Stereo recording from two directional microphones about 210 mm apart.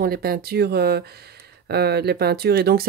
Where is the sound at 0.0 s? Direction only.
45° right (ahead or behind).